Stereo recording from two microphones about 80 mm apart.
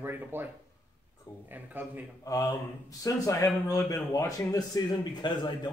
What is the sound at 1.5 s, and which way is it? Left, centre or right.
Speech, right.